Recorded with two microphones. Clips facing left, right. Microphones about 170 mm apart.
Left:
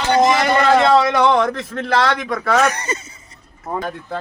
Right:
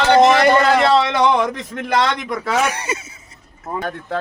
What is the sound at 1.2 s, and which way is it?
Speech, 15° right (ahead or behind).